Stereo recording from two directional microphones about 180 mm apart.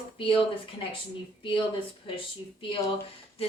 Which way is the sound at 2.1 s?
30° left (ahead or behind).